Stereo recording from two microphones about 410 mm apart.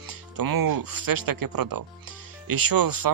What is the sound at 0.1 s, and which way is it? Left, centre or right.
Speech, right.